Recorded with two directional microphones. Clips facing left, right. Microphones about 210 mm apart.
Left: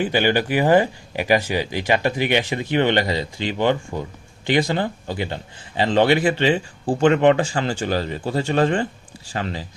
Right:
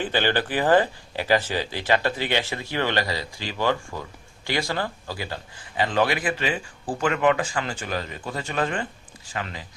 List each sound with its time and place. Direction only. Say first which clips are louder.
0.0 s a man's voice: left 5 dB; 10° left (ahead or behind); by 9.6 s 30° left (ahead or behind)